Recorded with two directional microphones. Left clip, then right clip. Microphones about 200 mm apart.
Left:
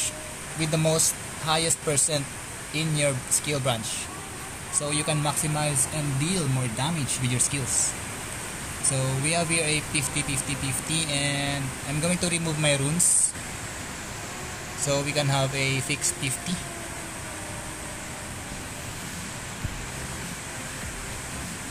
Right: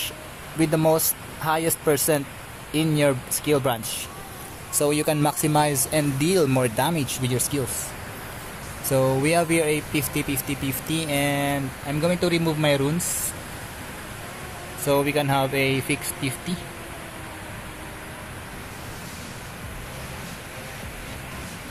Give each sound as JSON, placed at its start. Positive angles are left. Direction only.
{"t": 0.6, "sound": "speech", "side_deg": -25}
{"t": 4.7, "sound": "speech", "side_deg": -45}
{"t": 8.9, "sound": "speech", "side_deg": -30}
{"t": 14.9, "sound": "speech", "side_deg": -20}